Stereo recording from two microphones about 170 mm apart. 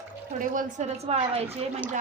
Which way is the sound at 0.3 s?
50° right (ahead or behind).